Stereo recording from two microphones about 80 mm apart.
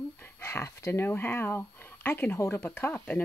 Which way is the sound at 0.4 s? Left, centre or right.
Left.